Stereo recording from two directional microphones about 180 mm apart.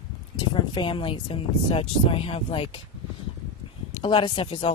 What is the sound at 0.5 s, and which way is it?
Speech, 25° left (ahead or behind).